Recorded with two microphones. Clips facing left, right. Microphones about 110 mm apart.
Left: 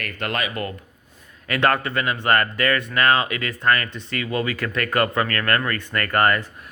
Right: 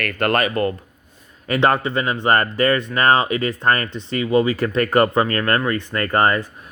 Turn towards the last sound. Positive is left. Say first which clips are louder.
# right 2 dB
turn(degrees=-25)  # may be behind; listen again after turning